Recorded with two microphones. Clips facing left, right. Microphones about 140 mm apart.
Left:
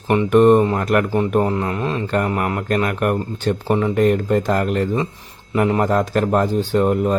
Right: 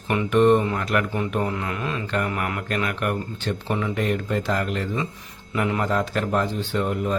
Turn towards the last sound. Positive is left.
turn(degrees=45)  # may be behind; listen again after turning